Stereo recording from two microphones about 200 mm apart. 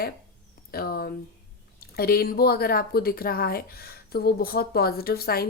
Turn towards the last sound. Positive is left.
turn(degrees=50)  # may be behind; listen again after turning